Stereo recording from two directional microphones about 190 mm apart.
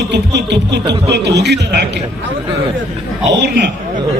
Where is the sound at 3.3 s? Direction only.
65° right (ahead or behind).